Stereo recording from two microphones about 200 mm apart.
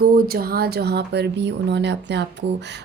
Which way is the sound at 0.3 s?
50° right (ahead or behind).